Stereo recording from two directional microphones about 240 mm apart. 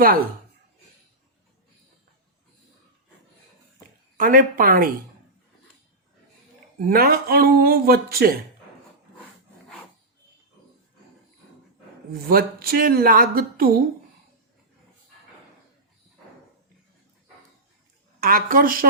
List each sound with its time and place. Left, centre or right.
4.2 s speech: right
6.7 s speech: right
12.1 s speech: right
18.2 s speech: right